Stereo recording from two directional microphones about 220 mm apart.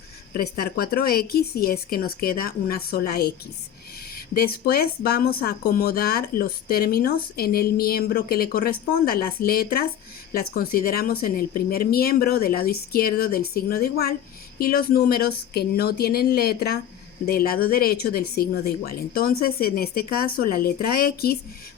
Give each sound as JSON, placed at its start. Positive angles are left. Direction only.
{"t": 0.6, "sound": "speech", "side_deg": 45}